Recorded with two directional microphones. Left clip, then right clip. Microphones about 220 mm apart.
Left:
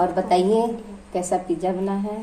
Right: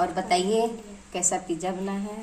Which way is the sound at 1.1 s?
50° right (ahead or behind).